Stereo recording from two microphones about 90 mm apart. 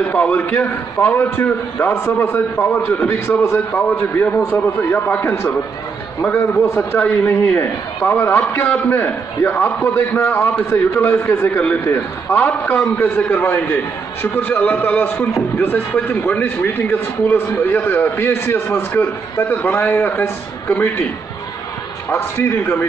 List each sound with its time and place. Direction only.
0.1 s a man's voice: 15° left (ahead or behind)
8.4 s a man's voice: 15° left (ahead or behind)
22.1 s a man's voice: 25° left (ahead or behind)